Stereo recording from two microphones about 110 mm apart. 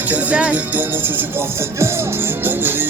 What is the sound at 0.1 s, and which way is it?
Speech, 15° right (ahead or behind).